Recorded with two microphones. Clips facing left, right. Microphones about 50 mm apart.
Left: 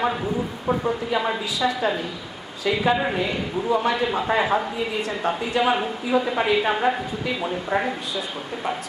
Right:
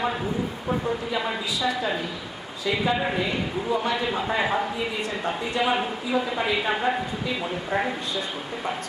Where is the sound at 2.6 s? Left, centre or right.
Left.